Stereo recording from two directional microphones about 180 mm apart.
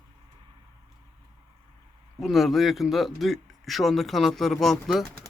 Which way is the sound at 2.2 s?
Centre (ahead or behind).